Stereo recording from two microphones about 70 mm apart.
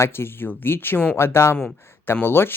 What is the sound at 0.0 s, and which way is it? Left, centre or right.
Speech, left.